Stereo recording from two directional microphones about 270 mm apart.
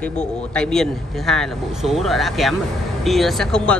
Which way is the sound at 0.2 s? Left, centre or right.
Centre.